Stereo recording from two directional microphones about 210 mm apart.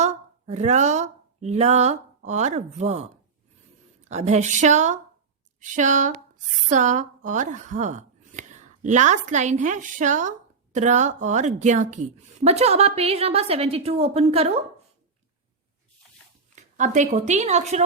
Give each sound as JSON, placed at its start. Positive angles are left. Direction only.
{"t": 0.0, "sound": "a woman's voice", "side_deg": -35}
{"t": 4.1, "sound": "a woman's voice", "side_deg": -35}
{"t": 16.6, "sound": "speech", "side_deg": -35}